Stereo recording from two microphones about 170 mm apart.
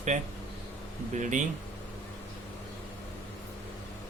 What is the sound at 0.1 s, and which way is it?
Speech, 50° right (ahead or behind).